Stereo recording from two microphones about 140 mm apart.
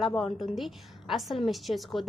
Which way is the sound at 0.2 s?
Centre (ahead or behind).